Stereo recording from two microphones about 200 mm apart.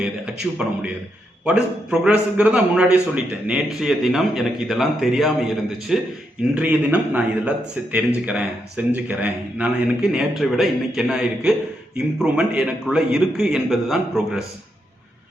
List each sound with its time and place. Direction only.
0.6 s a man's voice: 5° right (ahead or behind)